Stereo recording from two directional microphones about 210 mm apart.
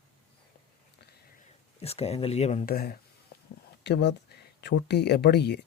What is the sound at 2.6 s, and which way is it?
Speech, 45° left (ahead or behind).